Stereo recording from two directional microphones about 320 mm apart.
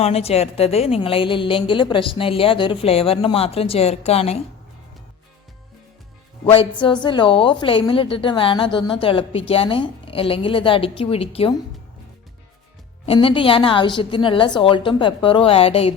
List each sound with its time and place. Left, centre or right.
0.0 s a woman's voice: centre
6.4 s a woman's voice: centre
13.1 s a woman's voice: centre